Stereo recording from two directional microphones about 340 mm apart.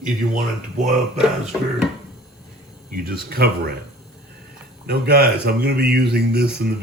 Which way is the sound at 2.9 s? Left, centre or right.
Right.